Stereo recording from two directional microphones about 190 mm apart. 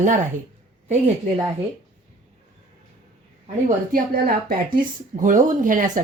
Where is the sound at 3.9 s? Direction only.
50° right (ahead or behind).